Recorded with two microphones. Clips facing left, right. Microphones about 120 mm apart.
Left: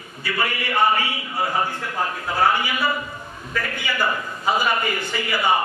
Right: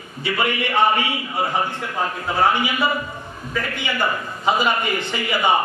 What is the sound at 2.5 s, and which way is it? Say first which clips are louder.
Speech: right 2 dB; 20° right (ahead or behind).